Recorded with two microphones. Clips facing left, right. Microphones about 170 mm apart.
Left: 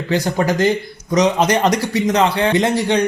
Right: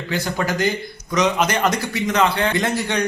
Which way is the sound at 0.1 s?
35° left (ahead or behind).